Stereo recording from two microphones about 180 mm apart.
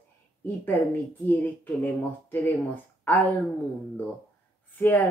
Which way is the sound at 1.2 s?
10° left (ahead or behind).